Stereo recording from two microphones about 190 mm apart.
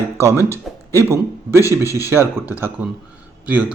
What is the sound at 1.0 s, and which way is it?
Speech, 15° right (ahead or behind).